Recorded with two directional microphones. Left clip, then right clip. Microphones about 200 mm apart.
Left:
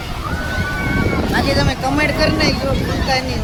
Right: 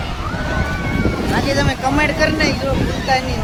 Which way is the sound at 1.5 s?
Centre (ahead or behind).